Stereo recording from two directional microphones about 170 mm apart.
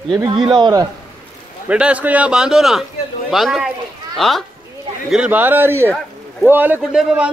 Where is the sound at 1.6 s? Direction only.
5° right (ahead or behind).